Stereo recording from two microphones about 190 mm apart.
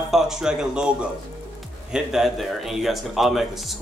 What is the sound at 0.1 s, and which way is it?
A man's voice, 5° right (ahead or behind).